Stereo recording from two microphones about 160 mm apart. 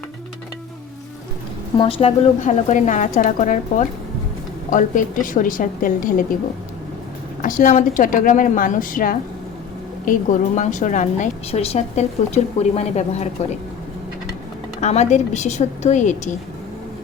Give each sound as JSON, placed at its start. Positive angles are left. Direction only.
{"t": 1.8, "sound": "a woman's voice", "side_deg": 35}
{"t": 7.4, "sound": "a woman's voice", "side_deg": 55}
{"t": 14.8, "sound": "a woman's voice", "side_deg": 45}